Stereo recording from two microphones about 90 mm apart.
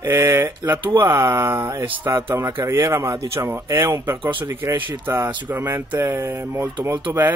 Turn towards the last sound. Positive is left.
turn(degrees=-25)  # may be behind; listen again after turning